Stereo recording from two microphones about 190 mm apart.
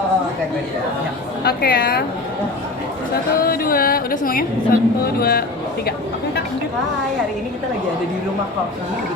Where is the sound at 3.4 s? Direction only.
50° left (ahead or behind).